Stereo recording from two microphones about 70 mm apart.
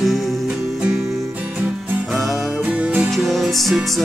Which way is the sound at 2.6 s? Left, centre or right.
Centre.